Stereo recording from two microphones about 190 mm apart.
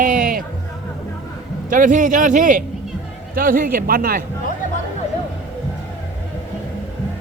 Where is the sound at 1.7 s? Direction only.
45° right (ahead or behind).